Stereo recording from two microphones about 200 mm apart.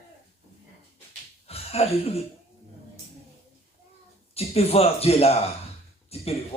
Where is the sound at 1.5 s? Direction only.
30° left (ahead or behind).